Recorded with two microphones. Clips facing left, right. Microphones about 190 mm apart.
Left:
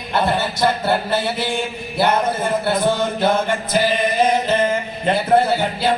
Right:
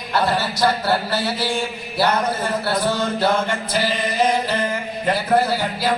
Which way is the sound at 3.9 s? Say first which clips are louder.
Left 3 dB; 55° left (ahead or behind).